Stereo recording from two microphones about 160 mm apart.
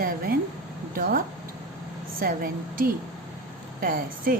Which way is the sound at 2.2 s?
65° right (ahead or behind).